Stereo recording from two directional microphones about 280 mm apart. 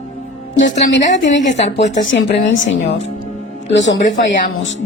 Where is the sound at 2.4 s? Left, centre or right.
Left.